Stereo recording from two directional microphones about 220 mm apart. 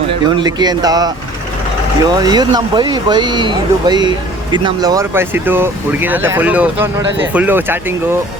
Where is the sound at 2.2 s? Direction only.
20° right (ahead or behind).